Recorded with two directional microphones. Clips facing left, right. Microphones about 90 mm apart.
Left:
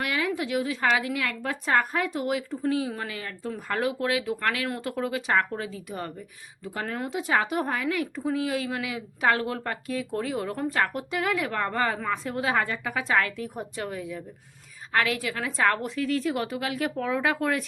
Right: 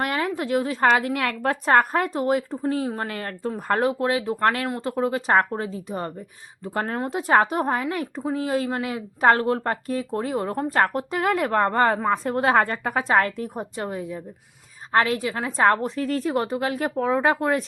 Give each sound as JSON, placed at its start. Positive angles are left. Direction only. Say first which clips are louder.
{"t": 0.0, "sound": "a woman's voice", "louder": "right 3 dB", "side_deg": -40}
{"t": 3.5, "sound": "speech", "louder": "right 5 dB", "side_deg": -35}